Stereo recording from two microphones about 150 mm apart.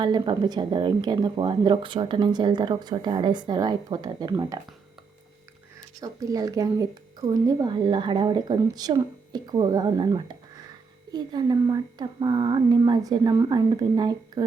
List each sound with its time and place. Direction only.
0.0 s speech: 30° right (ahead or behind)
6.0 s speech: 25° right (ahead or behind)